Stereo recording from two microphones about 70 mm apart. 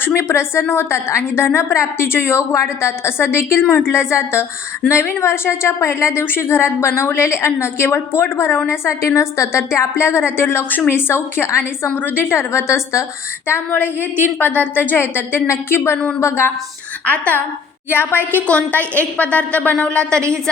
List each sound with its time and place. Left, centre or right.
0.0 s a woman's voice: left
13.5 s a woman's voice: left
17.1 s a woman's voice: left
18.2 s a woman's voice: right
18.4 s speech: left